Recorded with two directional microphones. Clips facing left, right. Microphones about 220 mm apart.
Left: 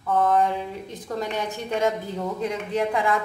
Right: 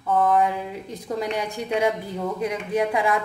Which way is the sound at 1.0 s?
10° right (ahead or behind).